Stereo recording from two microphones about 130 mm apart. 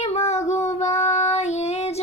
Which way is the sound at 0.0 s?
55° left (ahead or behind).